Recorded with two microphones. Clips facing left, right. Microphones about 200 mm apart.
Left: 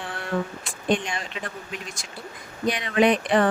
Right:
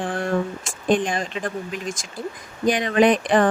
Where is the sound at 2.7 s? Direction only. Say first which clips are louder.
Right 3 dB; 40° right (ahead or behind).